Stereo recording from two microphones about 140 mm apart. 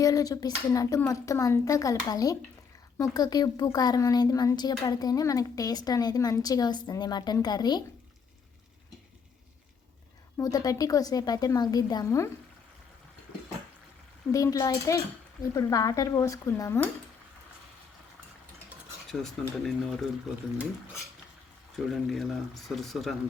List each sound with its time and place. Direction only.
0.0 s speech: 25° left (ahead or behind)
10.3 s speech: 25° left (ahead or behind)
14.3 s speech: 20° left (ahead or behind)
19.2 s speech: centre (ahead or behind)
21.8 s speech: centre (ahead or behind)